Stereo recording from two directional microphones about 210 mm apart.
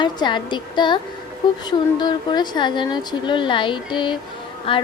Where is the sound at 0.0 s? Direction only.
20° left (ahead or behind).